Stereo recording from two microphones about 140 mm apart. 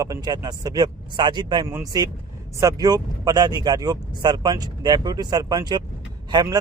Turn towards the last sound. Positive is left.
turn(degrees=-30)  # may be behind; listen again after turning